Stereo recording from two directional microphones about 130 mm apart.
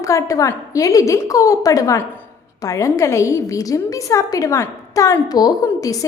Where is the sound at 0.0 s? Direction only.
25° left (ahead or behind).